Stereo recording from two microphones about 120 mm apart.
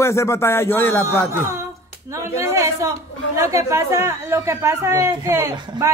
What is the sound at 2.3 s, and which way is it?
Speech, 25° right (ahead or behind).